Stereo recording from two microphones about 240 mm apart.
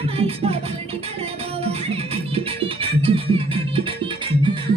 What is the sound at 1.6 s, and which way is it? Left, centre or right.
Music, right.